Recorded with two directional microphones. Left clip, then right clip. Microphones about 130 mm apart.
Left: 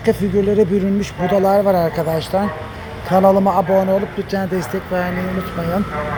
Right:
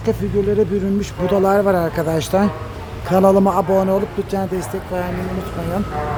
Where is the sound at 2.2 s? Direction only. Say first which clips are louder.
Right 1 dB; 45° right (ahead or behind).